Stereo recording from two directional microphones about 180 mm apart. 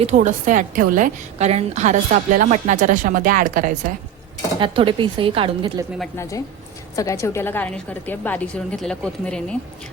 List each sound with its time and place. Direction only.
0.0 s a woman's voice: 40° right (ahead or behind)
4.6 s a woman's voice: 30° right (ahead or behind)
6.9 s a woman's voice: 20° left (ahead or behind)